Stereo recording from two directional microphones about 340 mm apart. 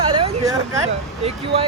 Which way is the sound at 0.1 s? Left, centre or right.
Centre.